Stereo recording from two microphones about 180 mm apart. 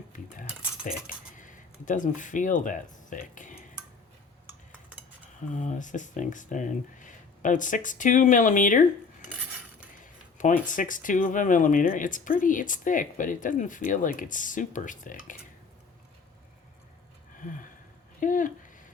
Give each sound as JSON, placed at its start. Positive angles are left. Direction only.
{"t": 1.0, "sound": "a sound", "side_deg": 45}
{"t": 4.4, "sound": "cutlery", "side_deg": -10}
{"t": 5.5, "sound": "speech", "side_deg": 45}
{"t": 10.0, "sound": "speech", "side_deg": 45}
{"t": 17.4, "sound": "a sound", "side_deg": 45}
{"t": 18.2, "sound": "speech", "side_deg": 45}